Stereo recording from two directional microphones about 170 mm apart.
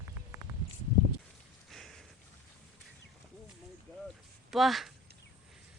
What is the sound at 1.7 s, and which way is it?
Rain, centre (ahead or behind).